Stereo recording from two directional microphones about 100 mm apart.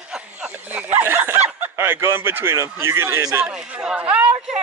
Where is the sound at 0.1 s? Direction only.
15° right (ahead or behind).